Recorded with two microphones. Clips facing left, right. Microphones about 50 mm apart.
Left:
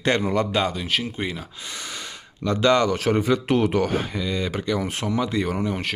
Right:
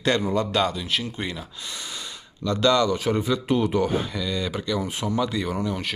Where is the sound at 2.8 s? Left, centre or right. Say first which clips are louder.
Left 2 dB; left.